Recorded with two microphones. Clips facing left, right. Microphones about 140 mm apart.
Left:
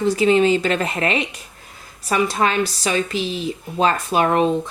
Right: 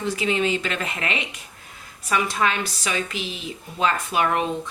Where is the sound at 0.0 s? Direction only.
35° left (ahead or behind).